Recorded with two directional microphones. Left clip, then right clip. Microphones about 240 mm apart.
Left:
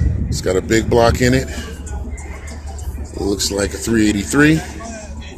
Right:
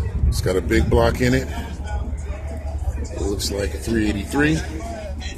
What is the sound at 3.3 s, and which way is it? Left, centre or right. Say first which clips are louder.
Speech: left 6 dB; left.